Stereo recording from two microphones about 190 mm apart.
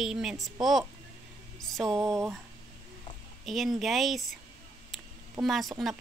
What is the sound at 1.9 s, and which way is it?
Speech, 15° right (ahead or behind).